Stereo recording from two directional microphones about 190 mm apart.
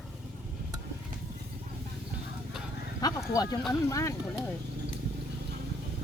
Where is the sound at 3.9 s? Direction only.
15° left (ahead or behind).